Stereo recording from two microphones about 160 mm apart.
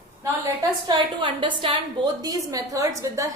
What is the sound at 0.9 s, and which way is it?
A woman's voice, 30° right (ahead or behind).